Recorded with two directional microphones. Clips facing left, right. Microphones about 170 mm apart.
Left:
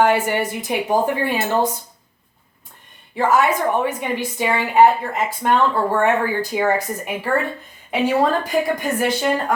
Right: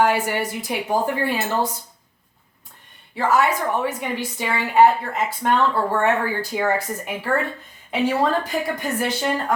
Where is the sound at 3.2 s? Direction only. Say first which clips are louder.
Left 2 dB; 15° left (ahead or behind).